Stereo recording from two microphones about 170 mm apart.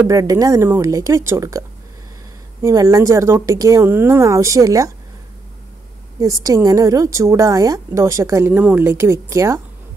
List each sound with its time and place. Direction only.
0.0 s a woman's voice: 20° right (ahead or behind)
2.6 s a woman's voice: 15° right (ahead or behind)
6.1 s a woman's voice: 20° right (ahead or behind)